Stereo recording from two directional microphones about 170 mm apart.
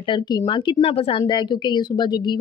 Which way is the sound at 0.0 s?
25° left (ahead or behind).